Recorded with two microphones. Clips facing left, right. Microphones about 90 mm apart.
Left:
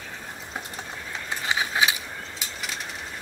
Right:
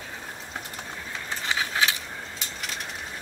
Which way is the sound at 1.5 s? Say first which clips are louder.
Left 2 dB; 15° left (ahead or behind).